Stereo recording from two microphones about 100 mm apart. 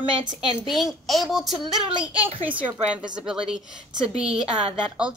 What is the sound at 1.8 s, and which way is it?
Speech, 60° right (ahead or behind).